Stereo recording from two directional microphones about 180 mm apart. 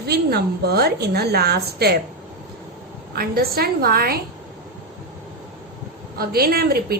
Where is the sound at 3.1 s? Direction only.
60° right (ahead or behind).